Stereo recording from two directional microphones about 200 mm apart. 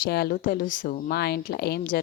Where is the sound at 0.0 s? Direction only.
50° left (ahead or behind).